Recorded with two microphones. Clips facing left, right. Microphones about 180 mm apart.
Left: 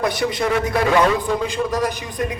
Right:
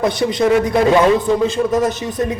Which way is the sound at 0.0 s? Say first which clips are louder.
Right 5 dB; 20° right (ahead or behind).